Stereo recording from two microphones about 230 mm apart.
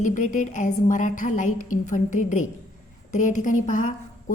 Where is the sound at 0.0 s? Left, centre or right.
Left.